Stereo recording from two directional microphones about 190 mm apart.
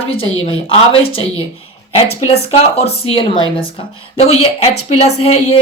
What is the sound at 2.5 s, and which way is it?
Speech, 35° left (ahead or behind).